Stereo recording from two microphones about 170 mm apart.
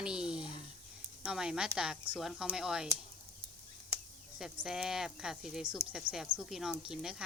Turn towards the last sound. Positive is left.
turn(degrees=-5)  # may be behind; listen again after turning